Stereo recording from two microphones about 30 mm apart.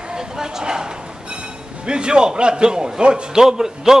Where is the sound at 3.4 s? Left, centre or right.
Centre.